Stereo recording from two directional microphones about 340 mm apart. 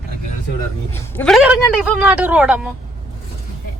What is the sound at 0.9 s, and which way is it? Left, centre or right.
Speech, centre.